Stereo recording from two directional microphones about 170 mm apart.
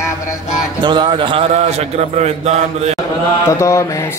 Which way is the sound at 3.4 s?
15° left (ahead or behind).